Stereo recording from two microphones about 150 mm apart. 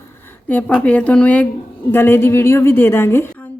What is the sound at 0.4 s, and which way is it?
A woman's voice, 10° left (ahead or behind).